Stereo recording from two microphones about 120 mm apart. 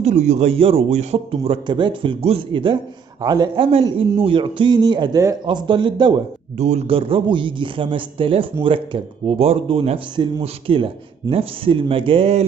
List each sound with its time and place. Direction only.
0.0 s speech: 70° right (ahead or behind); by 6.2 s 40° right (ahead or behind)
6.6 s speech: 70° right (ahead or behind)